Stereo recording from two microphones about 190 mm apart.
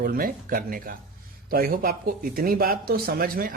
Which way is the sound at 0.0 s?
50° right (ahead or behind).